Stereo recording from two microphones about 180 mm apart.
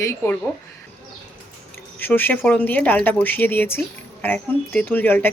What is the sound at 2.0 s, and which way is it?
A woman's voice, 10° left (ahead or behind).